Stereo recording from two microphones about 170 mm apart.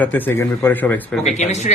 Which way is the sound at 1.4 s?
45° left (ahead or behind).